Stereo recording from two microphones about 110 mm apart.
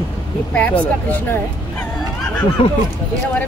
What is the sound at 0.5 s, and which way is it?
Speech, 15° left (ahead or behind).